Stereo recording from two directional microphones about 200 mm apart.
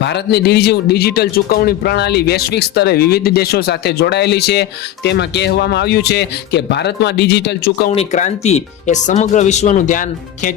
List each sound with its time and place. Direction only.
0.0 s a man's voice: 55° left (ahead or behind)
7.9 s speech: 35° left (ahead or behind)